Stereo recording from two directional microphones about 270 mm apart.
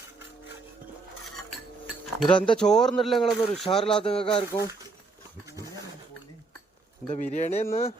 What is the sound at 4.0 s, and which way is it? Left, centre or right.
Speech, left.